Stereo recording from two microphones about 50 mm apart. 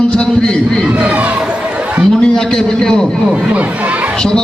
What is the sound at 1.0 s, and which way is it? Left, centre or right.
Speech, right.